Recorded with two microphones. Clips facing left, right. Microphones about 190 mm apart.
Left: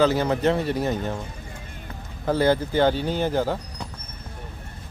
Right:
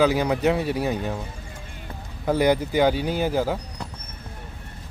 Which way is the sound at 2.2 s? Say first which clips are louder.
Even; 15° right (ahead or behind).